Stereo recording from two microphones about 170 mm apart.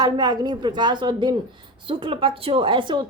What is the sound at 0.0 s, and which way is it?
A woman's voice, 25° right (ahead or behind).